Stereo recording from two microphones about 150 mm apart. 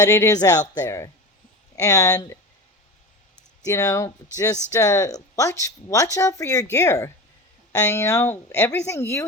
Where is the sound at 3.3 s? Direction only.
20° left (ahead or behind).